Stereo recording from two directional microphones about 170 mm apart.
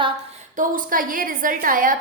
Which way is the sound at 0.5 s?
50° right (ahead or behind).